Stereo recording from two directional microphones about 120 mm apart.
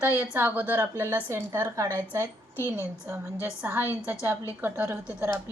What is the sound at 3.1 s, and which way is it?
A woman's voice, 20° right (ahead or behind).